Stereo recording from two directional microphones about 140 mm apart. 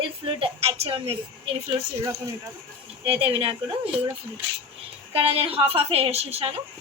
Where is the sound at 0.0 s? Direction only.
40° right (ahead or behind).